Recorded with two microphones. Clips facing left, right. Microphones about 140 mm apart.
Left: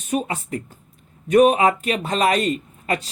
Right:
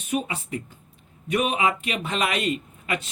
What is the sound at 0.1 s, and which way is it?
Speech, 45° left (ahead or behind).